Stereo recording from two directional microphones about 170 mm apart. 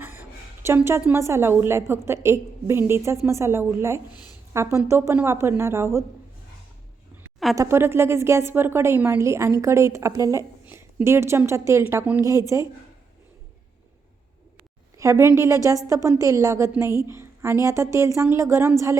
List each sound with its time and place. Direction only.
0.0 s a woman's voice: 10° right (ahead or behind)
7.5 s a woman's voice: 15° right (ahead or behind)
14.9 s a woman's voice: 20° right (ahead or behind)